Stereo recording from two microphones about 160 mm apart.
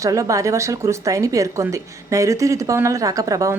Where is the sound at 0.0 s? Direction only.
20° right (ahead or behind).